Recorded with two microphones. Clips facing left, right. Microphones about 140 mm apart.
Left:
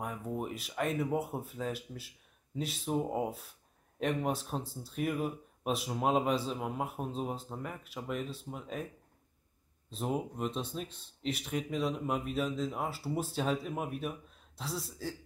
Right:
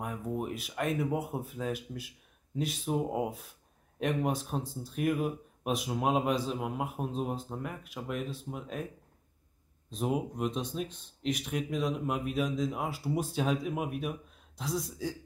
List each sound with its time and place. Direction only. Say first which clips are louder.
0.0 s speech: right 2 dB; 5° right (ahead or behind)
9.8 s speech: right 3 dB; 5° right (ahead or behind)
14.7 s speech: right 5 dB; 5° left (ahead or behind)